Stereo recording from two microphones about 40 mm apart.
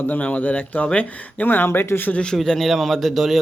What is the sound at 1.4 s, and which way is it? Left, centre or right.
Speech, left.